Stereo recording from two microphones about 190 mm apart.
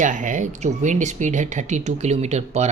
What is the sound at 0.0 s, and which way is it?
Speech, 40° right (ahead or behind).